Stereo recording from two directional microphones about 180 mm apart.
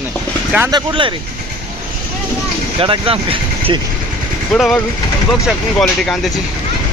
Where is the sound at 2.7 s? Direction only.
30° right (ahead or behind).